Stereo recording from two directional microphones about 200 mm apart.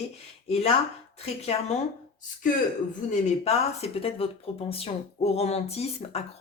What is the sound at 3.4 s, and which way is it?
Speech, 30° left (ahead or behind).